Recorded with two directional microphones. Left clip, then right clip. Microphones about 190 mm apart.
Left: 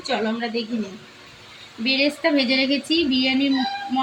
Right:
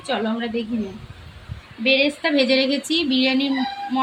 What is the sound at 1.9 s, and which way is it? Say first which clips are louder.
A woman's voice: right 2 dB; 5° right (ahead or behind).